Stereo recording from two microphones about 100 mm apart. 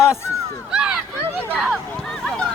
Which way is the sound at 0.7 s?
5° right (ahead or behind).